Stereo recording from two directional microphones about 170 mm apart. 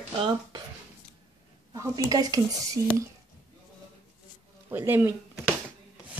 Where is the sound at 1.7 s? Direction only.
20° right (ahead or behind).